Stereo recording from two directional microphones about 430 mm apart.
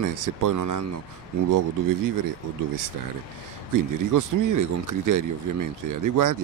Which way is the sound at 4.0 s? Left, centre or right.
Right.